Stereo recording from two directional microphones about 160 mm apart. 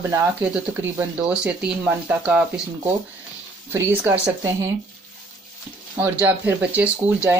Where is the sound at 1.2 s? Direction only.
5° right (ahead or behind).